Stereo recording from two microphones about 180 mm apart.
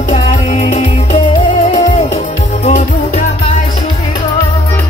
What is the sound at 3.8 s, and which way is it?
Music, 25° left (ahead or behind).